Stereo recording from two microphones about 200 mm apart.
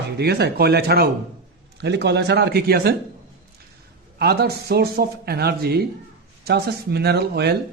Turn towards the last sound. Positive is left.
turn(degrees=-55)  # may be behind; listen again after turning